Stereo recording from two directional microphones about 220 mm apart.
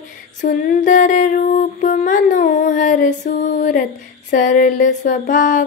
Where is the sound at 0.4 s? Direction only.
35° left (ahead or behind).